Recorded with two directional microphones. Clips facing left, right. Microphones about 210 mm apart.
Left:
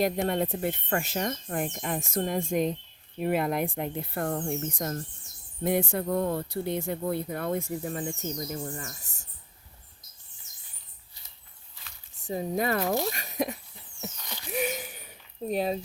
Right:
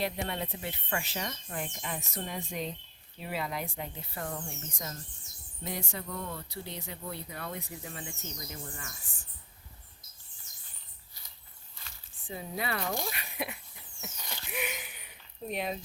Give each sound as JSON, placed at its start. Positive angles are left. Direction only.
{"t": 0.0, "sound": "speech", "side_deg": 45}
{"t": 12.1, "sound": "speech", "side_deg": 40}
{"t": 14.5, "sound": "a sound", "side_deg": 40}